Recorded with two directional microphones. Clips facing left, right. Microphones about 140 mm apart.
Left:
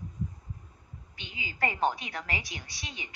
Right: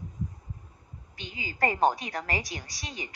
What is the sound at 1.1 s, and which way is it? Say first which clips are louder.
A woman's voice: right 4 dB; 40° right (ahead or behind).